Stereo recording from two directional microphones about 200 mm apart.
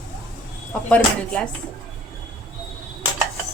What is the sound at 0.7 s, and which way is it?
Speech, 5° left (ahead or behind).